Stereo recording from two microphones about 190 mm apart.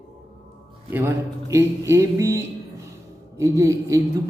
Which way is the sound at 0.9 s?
15° right (ahead or behind).